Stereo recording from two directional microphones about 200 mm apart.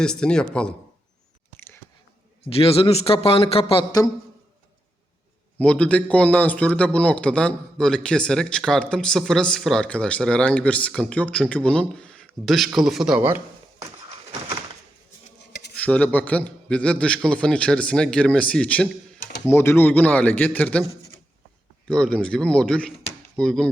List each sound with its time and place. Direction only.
0.0 s a man's voice: 5° left (ahead or behind)
2.5 s a man's voice: 30° left (ahead or behind)
5.5 s a man's voice: 5° left (ahead or behind)
15.7 s a man's voice: 5° left (ahead or behind)
21.8 s a man's voice: 5° left (ahead or behind)